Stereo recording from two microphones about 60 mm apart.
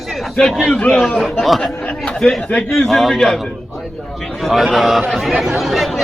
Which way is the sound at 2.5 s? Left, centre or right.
Centre.